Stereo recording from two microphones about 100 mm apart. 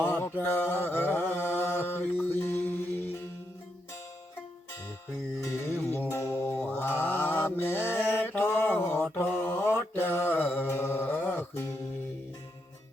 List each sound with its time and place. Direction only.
0.0 s mantra: 20° left (ahead or behind)
5.5 s music: 25° left (ahead or behind)
9.1 s mantra: 20° left (ahead or behind)